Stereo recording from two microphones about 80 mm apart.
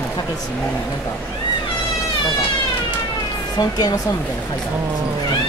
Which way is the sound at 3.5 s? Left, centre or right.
Left.